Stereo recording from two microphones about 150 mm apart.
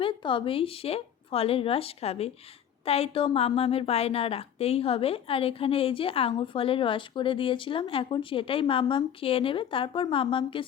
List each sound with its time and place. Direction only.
0.0 s a woman's voice: 35° left (ahead or behind)